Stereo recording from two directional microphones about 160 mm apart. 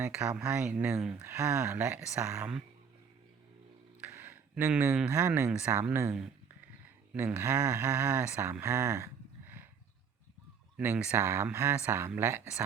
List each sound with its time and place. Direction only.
0.2 s speech: 5° right (ahead or behind)
4.0 s a sound: 10° right (ahead or behind)
5.1 s speech: 15° right (ahead or behind)
10.8 s speech: 10° right (ahead or behind)